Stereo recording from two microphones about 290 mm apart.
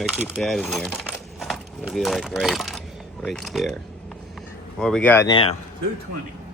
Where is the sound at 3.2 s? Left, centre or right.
Centre.